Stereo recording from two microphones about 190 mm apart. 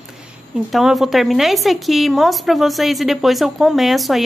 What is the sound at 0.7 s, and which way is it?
A woman's voice, centre (ahead or behind).